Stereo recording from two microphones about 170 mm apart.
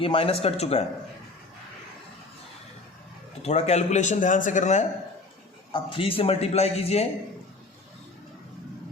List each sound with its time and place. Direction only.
0.0 s speech: 35° left (ahead or behind)
3.4 s speech: 40° left (ahead or behind)
5.7 s speech: 30° left (ahead or behind)